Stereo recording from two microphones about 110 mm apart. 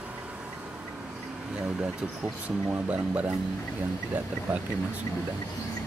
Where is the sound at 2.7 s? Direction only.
15° right (ahead or behind).